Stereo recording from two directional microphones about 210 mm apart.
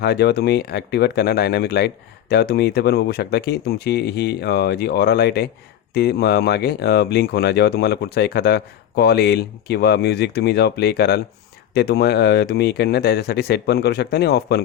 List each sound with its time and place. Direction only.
0.0 s speech: 50° left (ahead or behind)